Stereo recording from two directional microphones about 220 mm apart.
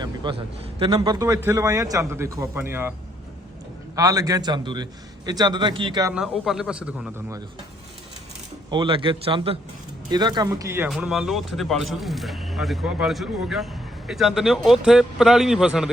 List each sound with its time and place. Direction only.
0.2 s a man's voice: 20° right (ahead or behind)
3.9 s a man's voice: 15° right (ahead or behind)
6.1 s speech: centre (ahead or behind)
8.7 s a man's voice: 20° right (ahead or behind); by 15.9 s centre (ahead or behind)